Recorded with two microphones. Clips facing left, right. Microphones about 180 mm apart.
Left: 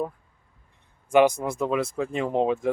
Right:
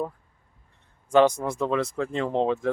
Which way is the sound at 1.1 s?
10° left (ahead or behind).